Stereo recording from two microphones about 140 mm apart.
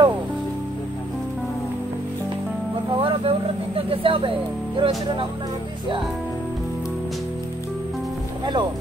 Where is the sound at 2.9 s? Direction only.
40° right (ahead or behind).